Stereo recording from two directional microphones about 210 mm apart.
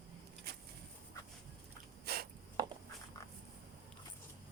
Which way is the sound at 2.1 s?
50° right (ahead or behind).